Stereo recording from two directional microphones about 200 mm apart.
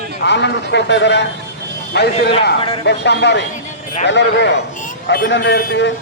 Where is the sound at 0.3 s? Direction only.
60° left (ahead or behind).